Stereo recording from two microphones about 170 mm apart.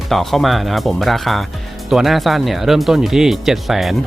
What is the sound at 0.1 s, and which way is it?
Speech, centre (ahead or behind).